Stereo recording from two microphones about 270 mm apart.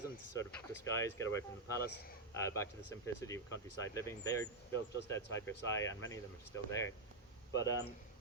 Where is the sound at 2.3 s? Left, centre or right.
Centre.